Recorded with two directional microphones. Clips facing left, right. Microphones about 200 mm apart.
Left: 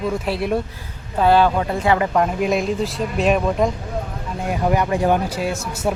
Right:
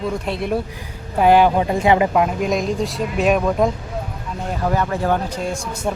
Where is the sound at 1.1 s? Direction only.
15° right (ahead or behind).